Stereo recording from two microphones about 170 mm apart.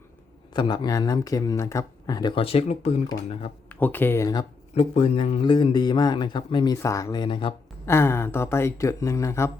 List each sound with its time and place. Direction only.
0.5 s speech: 25° left (ahead or behind)
3.7 s speech: 10° left (ahead or behind)
4.7 s speech: 35° left (ahead or behind)
7.9 s speech: 15° left (ahead or behind)